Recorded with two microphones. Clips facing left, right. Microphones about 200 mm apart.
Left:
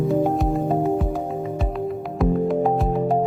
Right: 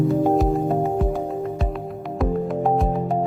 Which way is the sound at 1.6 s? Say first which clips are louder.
Left 3 dB; centre (ahead or behind).